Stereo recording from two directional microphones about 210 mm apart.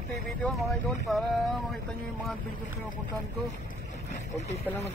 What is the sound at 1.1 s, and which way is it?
Speech, centre (ahead or behind).